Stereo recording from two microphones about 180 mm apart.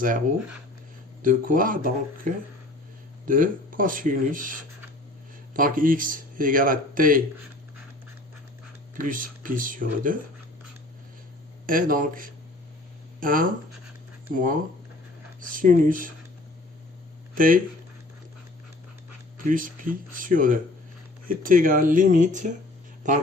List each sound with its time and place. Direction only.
1.2 s speech: 50° right (ahead or behind)
9.0 s speech: 50° right (ahead or behind)
11.6 s speech: 50° right (ahead or behind)
17.3 s speech: 50° right (ahead or behind)
19.5 s speech: 50° right (ahead or behind)